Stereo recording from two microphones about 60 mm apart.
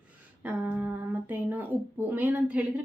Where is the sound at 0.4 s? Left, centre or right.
Right.